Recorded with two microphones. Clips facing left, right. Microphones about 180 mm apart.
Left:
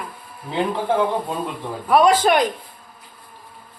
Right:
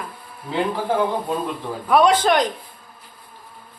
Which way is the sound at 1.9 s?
5° left (ahead or behind).